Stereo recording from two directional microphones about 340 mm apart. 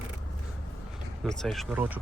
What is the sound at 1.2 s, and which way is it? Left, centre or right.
Speech, centre.